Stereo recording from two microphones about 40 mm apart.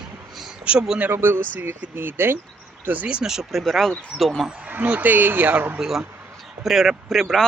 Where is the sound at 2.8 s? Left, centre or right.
Right.